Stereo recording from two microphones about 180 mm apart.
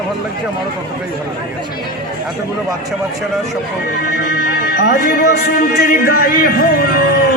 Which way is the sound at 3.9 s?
60° left (ahead or behind).